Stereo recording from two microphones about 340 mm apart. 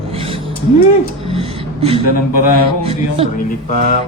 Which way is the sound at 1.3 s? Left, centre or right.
Centre.